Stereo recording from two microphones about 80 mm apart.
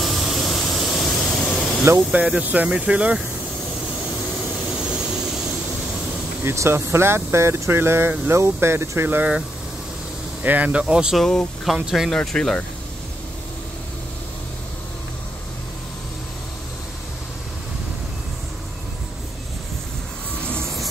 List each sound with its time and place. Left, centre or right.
0.0 s a sound: centre
2.1 s speech: centre
4.7 s vehicle: centre
6.4 s speech: right
10.4 s speech: centre
11.1 s speech: centre
12.2 s speech: centre